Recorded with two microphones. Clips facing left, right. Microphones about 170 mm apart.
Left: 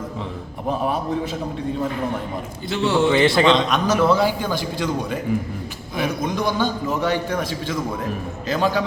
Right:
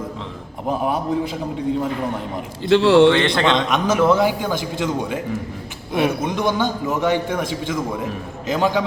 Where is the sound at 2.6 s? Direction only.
90° right.